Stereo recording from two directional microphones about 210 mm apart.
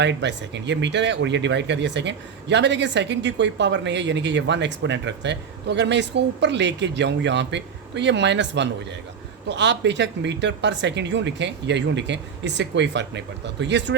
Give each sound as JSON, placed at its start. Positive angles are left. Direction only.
{"t": 0.0, "sound": "speech", "side_deg": -55}